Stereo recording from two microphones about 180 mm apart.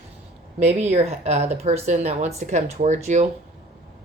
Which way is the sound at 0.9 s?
40° right (ahead or behind).